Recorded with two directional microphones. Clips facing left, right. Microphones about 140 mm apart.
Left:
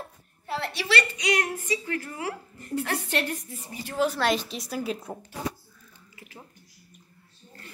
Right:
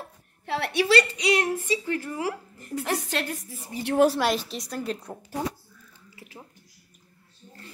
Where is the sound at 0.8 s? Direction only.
40° right (ahead or behind).